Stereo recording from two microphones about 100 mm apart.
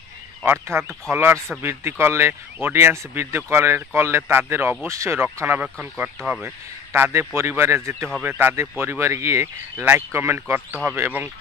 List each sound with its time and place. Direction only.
0.5 s speech: 25° right (ahead or behind)
6.0 s speech: 5° right (ahead or behind)
6.9 s speech: 25° right (ahead or behind)